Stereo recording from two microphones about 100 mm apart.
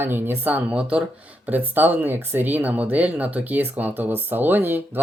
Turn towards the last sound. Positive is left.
turn(degrees=-20)  # may be behind; listen again after turning